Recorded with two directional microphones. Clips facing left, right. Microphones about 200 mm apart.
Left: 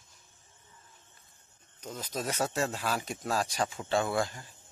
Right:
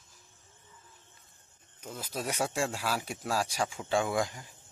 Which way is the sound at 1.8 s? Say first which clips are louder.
Left 1 dB; 10° right (ahead or behind).